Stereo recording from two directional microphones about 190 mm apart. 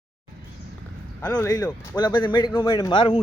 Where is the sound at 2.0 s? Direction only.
25° left (ahead or behind).